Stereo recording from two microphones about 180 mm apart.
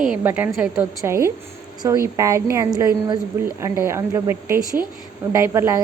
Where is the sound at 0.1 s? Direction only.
10° right (ahead or behind).